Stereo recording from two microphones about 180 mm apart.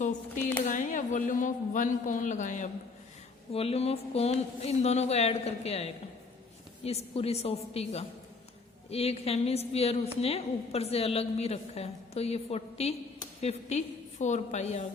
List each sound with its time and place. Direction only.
0.6 s speech: 45° left (ahead or behind)
3.5 s a woman's voice: 35° left (ahead or behind)